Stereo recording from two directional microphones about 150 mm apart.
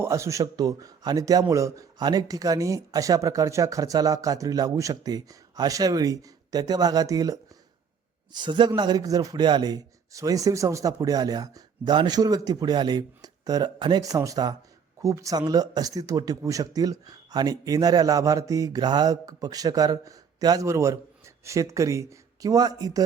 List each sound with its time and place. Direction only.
0.0 s speech: 20° right (ahead or behind)